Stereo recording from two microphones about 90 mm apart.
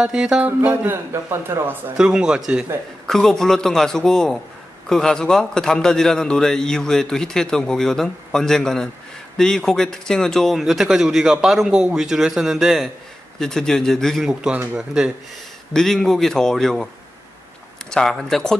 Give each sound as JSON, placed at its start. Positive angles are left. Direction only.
{"t": 0.0, "sound": "speech", "side_deg": -10}
{"t": 0.6, "sound": "a man's voice", "side_deg": -25}
{"t": 2.0, "sound": "speech", "side_deg": -10}
{"t": 3.1, "sound": "a man's voice", "side_deg": 5}
{"t": 14.5, "sound": "a man's voice", "side_deg": -20}
{"t": 15.7, "sound": "speech", "side_deg": 5}